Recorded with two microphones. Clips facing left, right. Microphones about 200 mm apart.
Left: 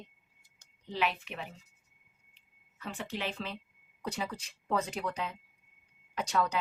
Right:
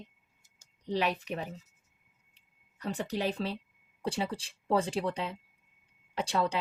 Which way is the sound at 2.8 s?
40° right (ahead or behind).